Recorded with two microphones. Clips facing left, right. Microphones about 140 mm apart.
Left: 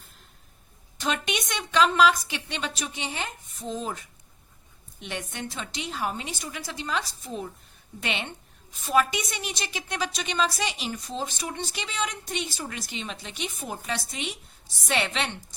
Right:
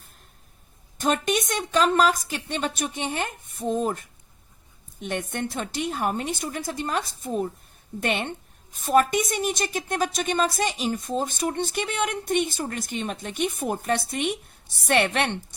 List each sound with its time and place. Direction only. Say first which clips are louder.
0.9 s a woman's voice: right 5 dB; 45° right (ahead or behind); by 15.5 s 60° right (ahead or behind)